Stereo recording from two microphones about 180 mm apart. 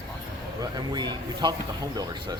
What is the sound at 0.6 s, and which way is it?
Speech, 25° right (ahead or behind).